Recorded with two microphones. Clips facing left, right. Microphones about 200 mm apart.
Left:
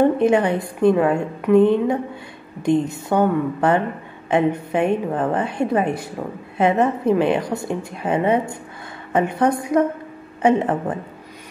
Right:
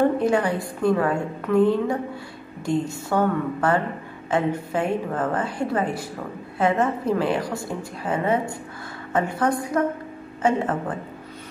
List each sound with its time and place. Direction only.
0.2 s a woman's voice: 20° left (ahead or behind)